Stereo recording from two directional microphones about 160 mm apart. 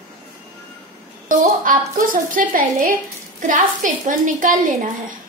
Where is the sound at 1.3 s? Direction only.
55° right (ahead or behind).